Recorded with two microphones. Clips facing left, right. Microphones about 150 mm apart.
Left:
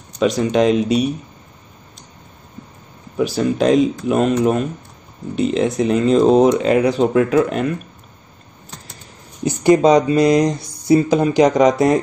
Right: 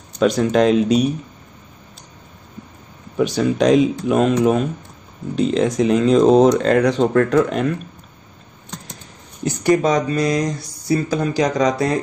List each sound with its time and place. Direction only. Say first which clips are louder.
0.2 s speech: even; centre (ahead or behind)
3.2 s speech: even; centre (ahead or behind)
9.4 s mantra: left 4 dB; 20° left (ahead or behind)